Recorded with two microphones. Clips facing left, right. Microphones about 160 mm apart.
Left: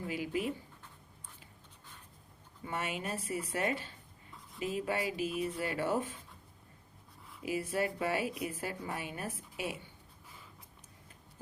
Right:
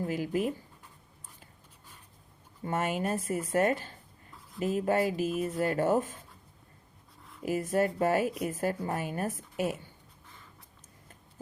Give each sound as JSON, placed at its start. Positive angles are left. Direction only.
{"t": 0.0, "sound": "speech", "side_deg": -45}
{"t": 2.6, "sound": "speech", "side_deg": -50}
{"t": 7.4, "sound": "speech", "side_deg": -45}